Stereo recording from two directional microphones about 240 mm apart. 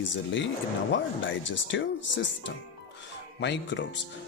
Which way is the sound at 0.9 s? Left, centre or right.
Left.